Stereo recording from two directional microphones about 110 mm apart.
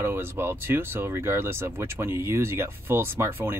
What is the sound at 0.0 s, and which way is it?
Speech, 20° right (ahead or behind).